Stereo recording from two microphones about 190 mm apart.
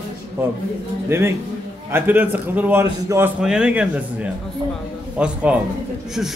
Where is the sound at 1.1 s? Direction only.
15° right (ahead or behind).